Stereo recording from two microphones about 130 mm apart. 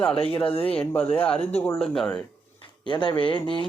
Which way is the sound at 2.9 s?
35° left (ahead or behind).